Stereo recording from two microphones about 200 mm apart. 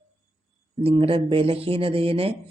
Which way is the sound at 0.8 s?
30° right (ahead or behind).